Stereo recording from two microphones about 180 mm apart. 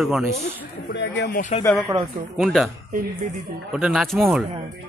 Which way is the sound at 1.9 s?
15° right (ahead or behind).